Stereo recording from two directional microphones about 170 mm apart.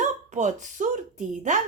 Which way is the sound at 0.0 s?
45° right (ahead or behind).